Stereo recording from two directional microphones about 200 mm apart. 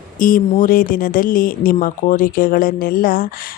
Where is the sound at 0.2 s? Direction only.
45° left (ahead or behind).